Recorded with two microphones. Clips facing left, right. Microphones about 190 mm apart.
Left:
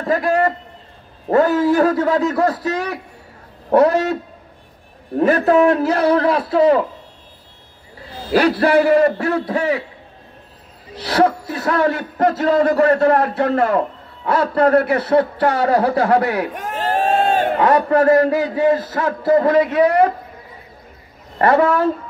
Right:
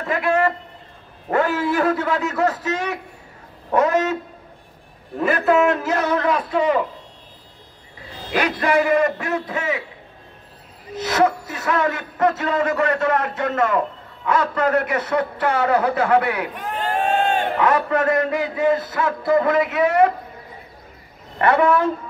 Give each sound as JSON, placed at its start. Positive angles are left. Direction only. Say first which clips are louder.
{"t": 0.0, "sound": "a man's voice", "louder": "left 3 dB", "side_deg": 35}
{"t": 5.2, "sound": "a man's voice", "louder": "left 4 dB", "side_deg": 40}
{"t": 8.3, "sound": "a man's voice", "louder": "left 6 dB", "side_deg": 35}
{"t": 11.0, "sound": "a man's voice", "louder": "left 2 dB", "side_deg": 35}
{"t": 21.4, "sound": "a man's voice", "louder": "left 2 dB", "side_deg": 35}